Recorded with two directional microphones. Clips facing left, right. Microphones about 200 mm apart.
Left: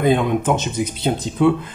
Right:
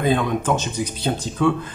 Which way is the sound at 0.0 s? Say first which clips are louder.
Left 3 dB; 20° left (ahead or behind).